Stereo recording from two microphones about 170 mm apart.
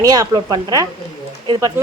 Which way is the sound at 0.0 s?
20° right (ahead or behind).